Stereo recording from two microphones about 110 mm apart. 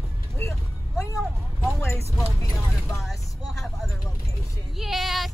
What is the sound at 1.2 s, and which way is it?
Vehicle, centre (ahead or behind).